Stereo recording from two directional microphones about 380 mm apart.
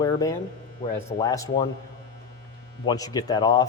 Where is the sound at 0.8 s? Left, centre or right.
Centre.